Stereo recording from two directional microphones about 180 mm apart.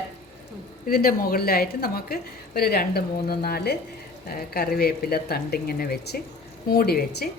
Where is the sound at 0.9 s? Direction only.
55° left (ahead or behind).